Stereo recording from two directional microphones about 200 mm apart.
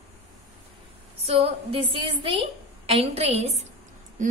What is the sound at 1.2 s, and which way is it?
A woman's voice, 30° right (ahead or behind).